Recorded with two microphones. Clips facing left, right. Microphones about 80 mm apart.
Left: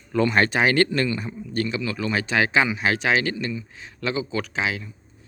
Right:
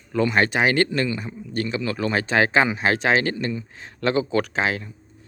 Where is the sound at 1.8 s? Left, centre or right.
Right.